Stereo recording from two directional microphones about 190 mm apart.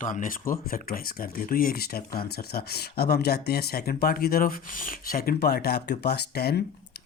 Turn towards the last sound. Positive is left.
turn(degrees=55)  # may be behind; listen again after turning